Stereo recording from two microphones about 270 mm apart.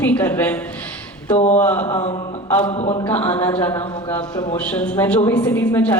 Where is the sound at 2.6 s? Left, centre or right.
Centre.